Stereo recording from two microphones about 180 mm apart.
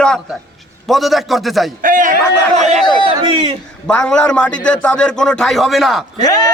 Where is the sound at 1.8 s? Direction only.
50° right (ahead or behind).